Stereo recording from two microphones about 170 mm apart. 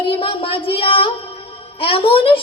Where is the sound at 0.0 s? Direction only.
30° left (ahead or behind).